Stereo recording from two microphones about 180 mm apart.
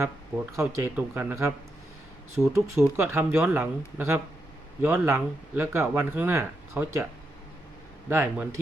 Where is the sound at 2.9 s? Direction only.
15° right (ahead or behind).